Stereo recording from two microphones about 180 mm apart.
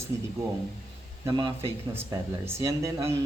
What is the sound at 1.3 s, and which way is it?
A man's voice, 25° right (ahead or behind).